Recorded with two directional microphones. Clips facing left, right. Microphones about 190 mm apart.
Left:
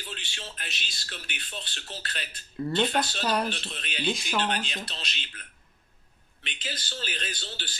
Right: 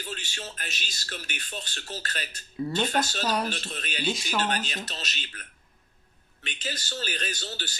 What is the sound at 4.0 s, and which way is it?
Speech, centre (ahead or behind).